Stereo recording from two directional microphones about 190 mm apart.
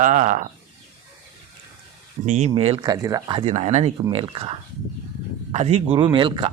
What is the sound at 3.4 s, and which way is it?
Speech, 35° right (ahead or behind).